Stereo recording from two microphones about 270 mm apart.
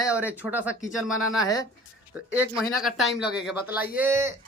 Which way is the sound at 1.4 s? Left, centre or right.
Centre.